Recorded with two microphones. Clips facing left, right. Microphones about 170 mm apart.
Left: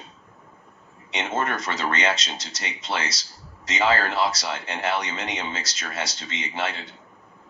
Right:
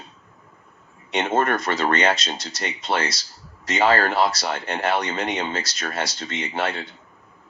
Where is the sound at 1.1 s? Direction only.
60° right (ahead or behind).